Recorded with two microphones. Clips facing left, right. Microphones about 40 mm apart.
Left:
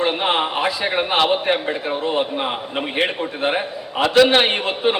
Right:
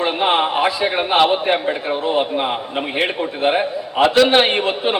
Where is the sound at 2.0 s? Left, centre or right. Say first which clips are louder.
Right 2 dB; right.